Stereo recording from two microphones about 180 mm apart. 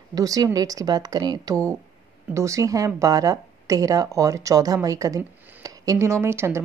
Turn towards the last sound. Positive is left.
turn(degrees=-15)  # may be behind; listen again after turning